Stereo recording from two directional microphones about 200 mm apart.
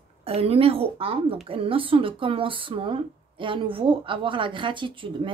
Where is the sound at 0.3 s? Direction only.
30° right (ahead or behind).